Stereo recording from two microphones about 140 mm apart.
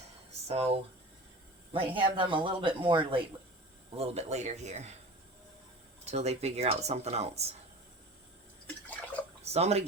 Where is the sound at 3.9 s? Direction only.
45° right (ahead or behind).